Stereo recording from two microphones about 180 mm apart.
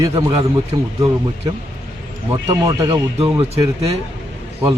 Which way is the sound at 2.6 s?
25° right (ahead or behind).